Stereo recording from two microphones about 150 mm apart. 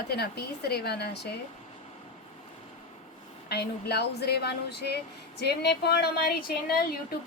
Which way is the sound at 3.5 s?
90° left.